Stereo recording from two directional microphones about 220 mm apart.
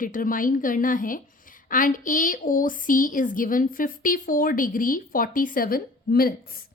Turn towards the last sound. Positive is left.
turn(degrees=40)  # may be behind; listen again after turning